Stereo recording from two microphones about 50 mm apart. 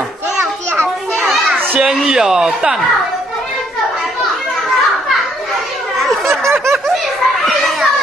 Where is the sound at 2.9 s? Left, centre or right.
Centre.